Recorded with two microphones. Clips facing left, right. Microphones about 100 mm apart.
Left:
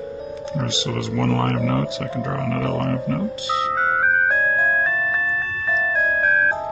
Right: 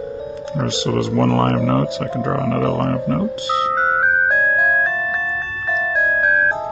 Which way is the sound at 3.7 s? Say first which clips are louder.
Right 1 dB; 20° right (ahead or behind).